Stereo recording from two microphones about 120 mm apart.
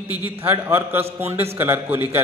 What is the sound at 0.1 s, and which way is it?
A man's voice, 15° right (ahead or behind).